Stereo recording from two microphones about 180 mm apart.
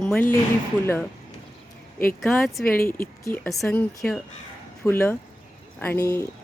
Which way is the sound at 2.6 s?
55° left (ahead or behind).